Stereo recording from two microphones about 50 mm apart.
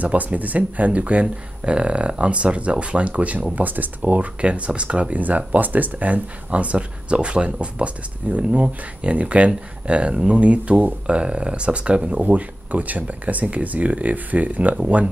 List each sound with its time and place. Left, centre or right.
0.0 s speech: right
11.1 s speech: right